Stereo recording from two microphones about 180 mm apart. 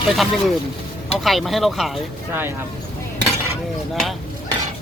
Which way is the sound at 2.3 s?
10° right (ahead or behind).